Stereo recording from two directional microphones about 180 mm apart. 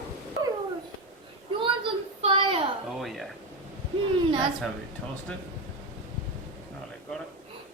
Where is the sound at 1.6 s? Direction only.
30° right (ahead or behind).